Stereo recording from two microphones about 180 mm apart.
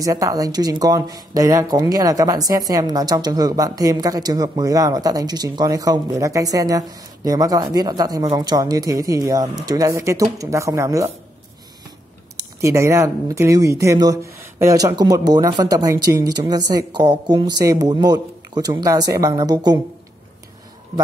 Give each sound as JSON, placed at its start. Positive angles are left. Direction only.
{"t": 0.0, "sound": "speech", "side_deg": -20}
{"t": 12.5, "sound": "speech", "side_deg": -15}